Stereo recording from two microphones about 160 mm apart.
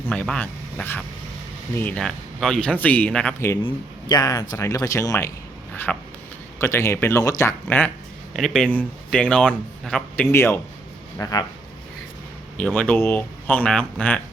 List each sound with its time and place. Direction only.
0.1 s speech: 5° left (ahead or behind)
3.6 s speech: 30° left (ahead or behind)
5.7 s a sound: 10° left (ahead or behind)
6.6 s speech: 15° left (ahead or behind)
8.3 s speech: centre (ahead or behind); by 11.4 s 25° left (ahead or behind)
12.5 s speech: 10° left (ahead or behind)